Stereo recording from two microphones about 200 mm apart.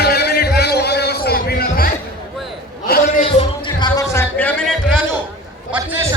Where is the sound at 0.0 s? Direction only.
55° left (ahead or behind).